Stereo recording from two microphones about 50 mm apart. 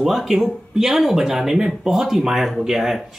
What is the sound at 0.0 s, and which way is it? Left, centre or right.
Speech, centre.